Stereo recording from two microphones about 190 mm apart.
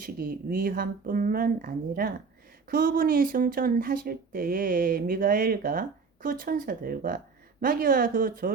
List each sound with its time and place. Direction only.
0.0 s speech: 50° right (ahead or behind)